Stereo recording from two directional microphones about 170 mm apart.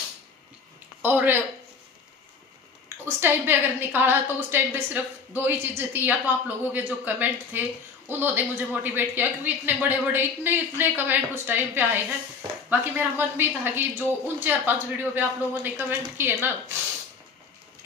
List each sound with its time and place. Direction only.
1.0 s speech: 10° right (ahead or behind)
3.2 s speech: 10° right (ahead or behind)